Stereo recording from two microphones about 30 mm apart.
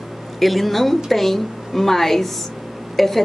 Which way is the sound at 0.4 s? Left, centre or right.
Centre.